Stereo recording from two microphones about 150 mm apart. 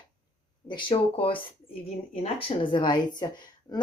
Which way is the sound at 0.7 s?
35° left (ahead or behind).